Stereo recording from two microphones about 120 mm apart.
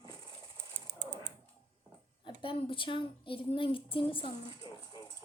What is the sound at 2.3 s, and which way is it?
A woman's voice, 45° left (ahead or behind).